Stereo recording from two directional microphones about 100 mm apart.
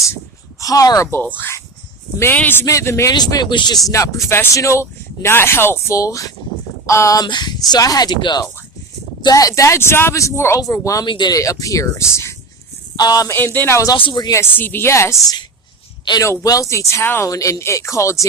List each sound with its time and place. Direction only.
0.6 s speech: 35° left (ahead or behind)
1.0 s speech: 20° left (ahead or behind)
2.6 s speech: 30° left (ahead or behind)
3.1 s speech: 40° left (ahead or behind)
7.3 s speech: 45° left (ahead or behind)
9.2 s speech: 35° left (ahead or behind)
11.0 s speech: 50° left (ahead or behind)
11.3 s speech: 35° left (ahead or behind)
13.0 s speech: 40° left (ahead or behind)
13.3 s speech: 20° left (ahead or behind)
13.9 s speech: 50° left (ahead or behind)
14.3 s speech: 20° left (ahead or behind)
16.2 s speech: 35° left (ahead or behind)